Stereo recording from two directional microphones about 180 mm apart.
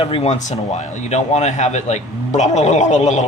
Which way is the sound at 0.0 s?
30° left (ahead or behind).